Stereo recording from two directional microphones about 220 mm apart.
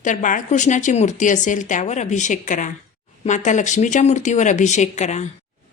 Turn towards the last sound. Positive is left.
turn(degrees=30)  # may be behind; listen again after turning